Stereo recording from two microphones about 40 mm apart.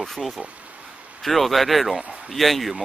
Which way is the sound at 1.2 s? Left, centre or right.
Centre.